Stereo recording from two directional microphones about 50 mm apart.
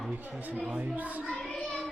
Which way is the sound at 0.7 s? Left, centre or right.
Right.